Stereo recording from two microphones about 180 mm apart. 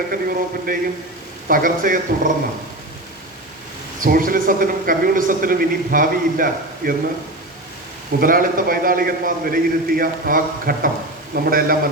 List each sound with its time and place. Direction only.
0.1 s a man's voice: 50° right (ahead or behind)
4.0 s a man's voice: 50° right (ahead or behind)
8.2 s a man's voice: 50° right (ahead or behind)